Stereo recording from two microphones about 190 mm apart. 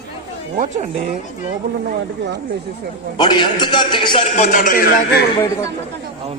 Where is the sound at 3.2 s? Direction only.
25° left (ahead or behind).